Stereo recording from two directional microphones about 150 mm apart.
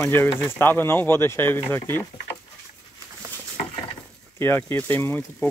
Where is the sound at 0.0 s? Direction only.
15° left (ahead or behind).